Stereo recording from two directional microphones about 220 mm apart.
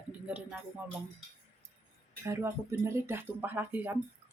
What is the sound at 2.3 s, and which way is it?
Speech, 10° right (ahead or behind).